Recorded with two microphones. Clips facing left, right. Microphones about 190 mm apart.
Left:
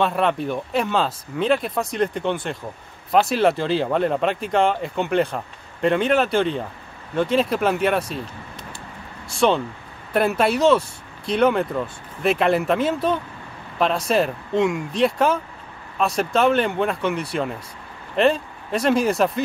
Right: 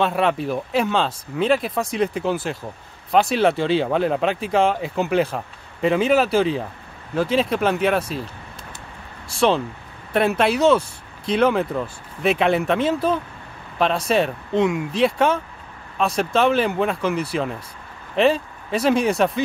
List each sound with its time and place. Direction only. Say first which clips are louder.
0.0 s speech: right 1 dB; centre (ahead or behind)
9.3 s speech: even; centre (ahead or behind)